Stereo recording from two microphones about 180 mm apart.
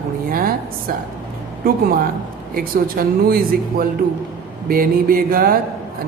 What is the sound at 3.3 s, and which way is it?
Speech, 55° right (ahead or behind).